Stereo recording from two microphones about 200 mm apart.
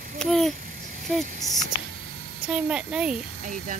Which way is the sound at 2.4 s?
5° right (ahead or behind).